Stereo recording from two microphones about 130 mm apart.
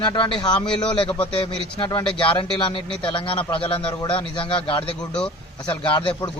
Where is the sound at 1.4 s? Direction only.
40° left (ahead or behind).